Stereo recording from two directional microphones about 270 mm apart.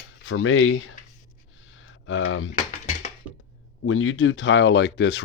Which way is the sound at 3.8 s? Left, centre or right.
Left.